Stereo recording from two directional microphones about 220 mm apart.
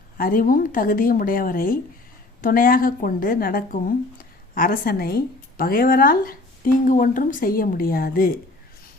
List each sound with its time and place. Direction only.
0.2 s a woman's voice: 40° left (ahead or behind)